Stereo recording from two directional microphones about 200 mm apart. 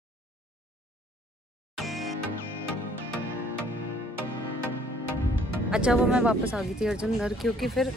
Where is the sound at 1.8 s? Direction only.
Centre (ahead or behind).